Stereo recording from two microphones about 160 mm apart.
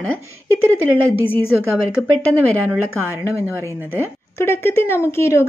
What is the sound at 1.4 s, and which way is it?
Speech, 5° right (ahead or behind).